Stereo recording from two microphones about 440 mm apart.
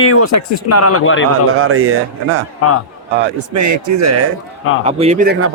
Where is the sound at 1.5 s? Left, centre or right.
Right.